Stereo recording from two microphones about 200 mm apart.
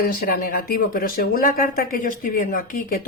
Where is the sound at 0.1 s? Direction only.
45° left (ahead or behind).